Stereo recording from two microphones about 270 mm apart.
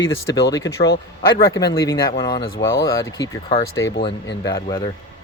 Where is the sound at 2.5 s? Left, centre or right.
Left.